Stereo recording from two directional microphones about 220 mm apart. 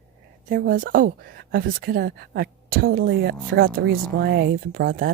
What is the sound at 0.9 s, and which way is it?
Speech, 40° right (ahead or behind).